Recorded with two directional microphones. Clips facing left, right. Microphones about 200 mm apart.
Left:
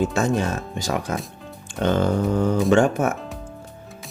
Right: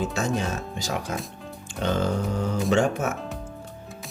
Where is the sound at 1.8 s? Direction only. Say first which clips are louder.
Left 5 dB; 55° left (ahead or behind).